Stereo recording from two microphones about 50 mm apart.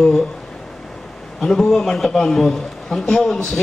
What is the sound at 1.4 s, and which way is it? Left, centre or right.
A man's voice, centre.